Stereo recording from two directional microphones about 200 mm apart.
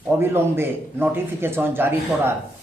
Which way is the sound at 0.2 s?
10° right (ahead or behind).